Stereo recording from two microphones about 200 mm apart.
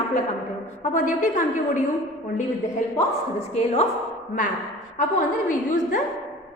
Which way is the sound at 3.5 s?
30° left (ahead or behind).